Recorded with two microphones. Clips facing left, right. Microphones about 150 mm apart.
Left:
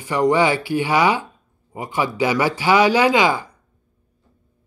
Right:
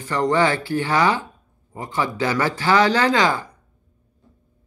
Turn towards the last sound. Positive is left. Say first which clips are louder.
# left 2 dB
turn(degrees=10)  # may be behind; listen again after turning